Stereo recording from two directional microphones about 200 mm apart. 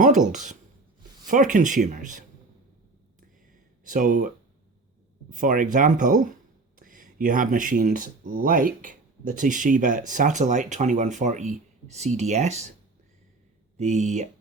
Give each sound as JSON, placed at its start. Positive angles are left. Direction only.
{"t": 0.0, "sound": "speech", "side_deg": -40}
{"t": 3.8, "sound": "speech", "side_deg": -40}
{"t": 5.3, "sound": "speech", "side_deg": -40}
{"t": 13.7, "sound": "speech", "side_deg": -35}